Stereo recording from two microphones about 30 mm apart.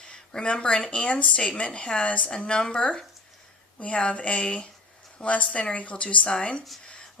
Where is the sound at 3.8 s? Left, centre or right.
Left.